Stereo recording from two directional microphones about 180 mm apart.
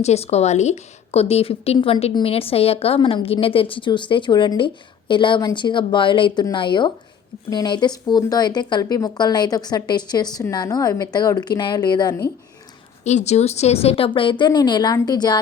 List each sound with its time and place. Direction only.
0.0 s a woman's voice: 35° left (ahead or behind)
13.1 s a woman's voice: 40° left (ahead or behind); by 15.4 s 20° left (ahead or behind)